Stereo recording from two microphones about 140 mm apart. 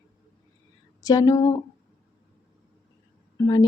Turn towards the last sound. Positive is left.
turn(degrees=25)  # may be behind; listen again after turning